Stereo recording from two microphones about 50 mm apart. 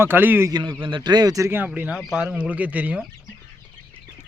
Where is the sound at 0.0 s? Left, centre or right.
Right.